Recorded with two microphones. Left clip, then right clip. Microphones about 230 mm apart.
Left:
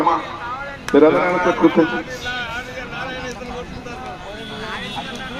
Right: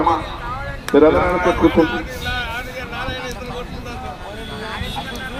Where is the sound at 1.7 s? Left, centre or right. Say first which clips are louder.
Right 1 dB; right.